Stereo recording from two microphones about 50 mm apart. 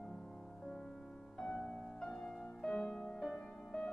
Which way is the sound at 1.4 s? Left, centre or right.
Centre.